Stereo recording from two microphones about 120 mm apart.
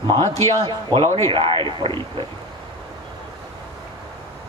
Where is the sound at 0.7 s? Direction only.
45° right (ahead or behind).